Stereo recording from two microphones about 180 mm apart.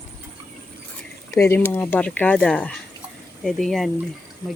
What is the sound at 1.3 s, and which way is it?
Speech, 15° left (ahead or behind).